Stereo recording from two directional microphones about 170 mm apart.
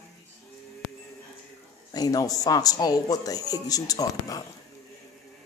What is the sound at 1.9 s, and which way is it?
A man's voice, 20° left (ahead or behind).